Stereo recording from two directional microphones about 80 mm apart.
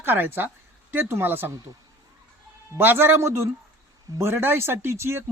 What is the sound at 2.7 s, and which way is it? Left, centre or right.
Speech, right.